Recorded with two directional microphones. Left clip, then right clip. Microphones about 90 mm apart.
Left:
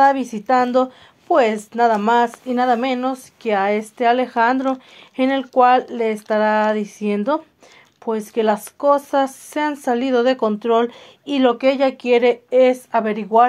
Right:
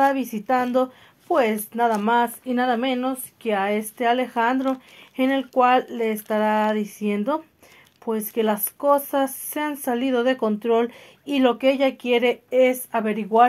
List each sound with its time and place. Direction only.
0.0 s speech: 30° left (ahead or behind)
5.1 s speech: 45° left (ahead or behind); by 11.9 s 20° left (ahead or behind)
12.0 s speech: 30° left (ahead or behind)